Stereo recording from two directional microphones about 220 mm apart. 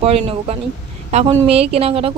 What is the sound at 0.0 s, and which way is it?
A woman's voice, 25° right (ahead or behind).